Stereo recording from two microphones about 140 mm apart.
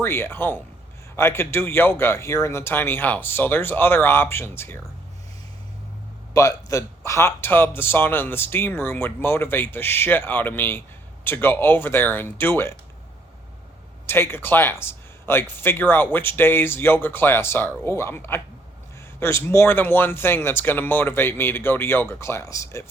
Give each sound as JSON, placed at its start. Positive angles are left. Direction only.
{"t": 0.0, "sound": "speech", "side_deg": 15}
{"t": 6.3, "sound": "speech", "side_deg": 25}
{"t": 14.1, "sound": "speech", "side_deg": 15}